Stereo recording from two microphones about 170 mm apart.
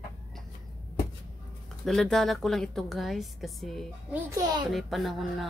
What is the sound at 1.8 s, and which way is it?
A woman's voice, 5° left (ahead or behind).